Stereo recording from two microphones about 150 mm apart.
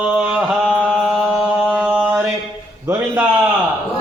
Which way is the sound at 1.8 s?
10° right (ahead or behind).